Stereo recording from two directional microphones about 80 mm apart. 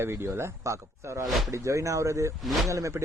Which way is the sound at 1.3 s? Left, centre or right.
Centre.